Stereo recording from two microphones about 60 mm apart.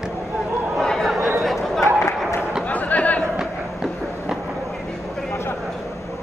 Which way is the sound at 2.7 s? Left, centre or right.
Left.